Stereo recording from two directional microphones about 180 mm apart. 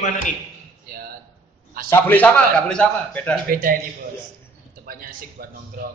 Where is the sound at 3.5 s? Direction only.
50° right (ahead or behind).